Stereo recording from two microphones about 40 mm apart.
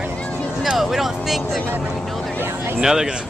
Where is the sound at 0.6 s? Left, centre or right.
Centre.